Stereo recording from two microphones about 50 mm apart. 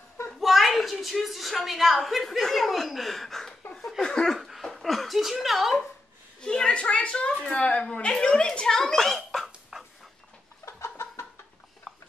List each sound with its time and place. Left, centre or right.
0.4 s a woman's voice: centre
3.7 s laughter: centre
4.4 s a sound: centre
4.6 s speech: centre
6.4 s a woman's voice: centre
9.7 s dog: centre
10.6 s chicken: left